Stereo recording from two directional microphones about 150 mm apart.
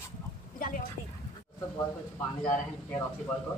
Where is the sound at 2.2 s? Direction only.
10° left (ahead or behind).